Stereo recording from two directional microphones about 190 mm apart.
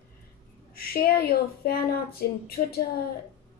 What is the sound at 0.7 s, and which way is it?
A woman's voice, 50° left (ahead or behind).